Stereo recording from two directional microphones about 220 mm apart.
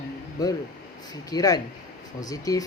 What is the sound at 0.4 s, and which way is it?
Speech, 15° left (ahead or behind).